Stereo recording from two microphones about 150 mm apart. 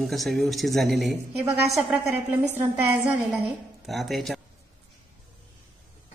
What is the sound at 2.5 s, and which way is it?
Speech, 15° right (ahead or behind).